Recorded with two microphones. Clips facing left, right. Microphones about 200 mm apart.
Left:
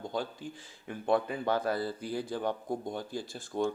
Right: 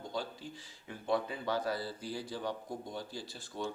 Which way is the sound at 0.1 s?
50° left (ahead or behind).